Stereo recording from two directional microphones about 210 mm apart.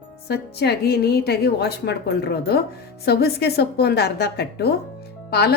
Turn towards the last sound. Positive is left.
turn(degrees=50)  # may be behind; listen again after turning